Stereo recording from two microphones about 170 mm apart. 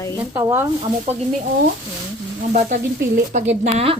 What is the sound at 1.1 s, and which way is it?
Speech, 40° right (ahead or behind).